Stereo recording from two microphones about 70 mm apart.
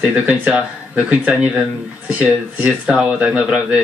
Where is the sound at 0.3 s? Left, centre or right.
Right.